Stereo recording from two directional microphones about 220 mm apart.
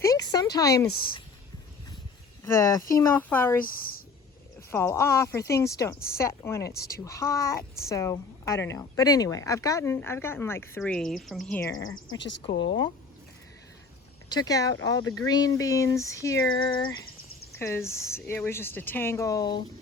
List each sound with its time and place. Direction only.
0.0 s a sound: 15° left (ahead or behind)
2.4 s speech: 15° left (ahead or behind)
3.6 s speech: 40° left (ahead or behind)
4.7 s speech: 10° left (ahead or behind)
6.7 s speech: 45° left (ahead or behind)
7.0 s speech: 15° left (ahead or behind)
12.1 s speech: 55° left (ahead or behind)
12.4 s a woman's voice: 25° left (ahead or behind)
14.3 s speech: 15° left (ahead or behind)